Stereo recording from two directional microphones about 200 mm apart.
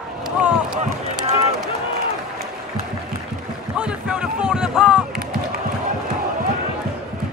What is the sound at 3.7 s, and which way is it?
Run, 5° right (ahead or behind).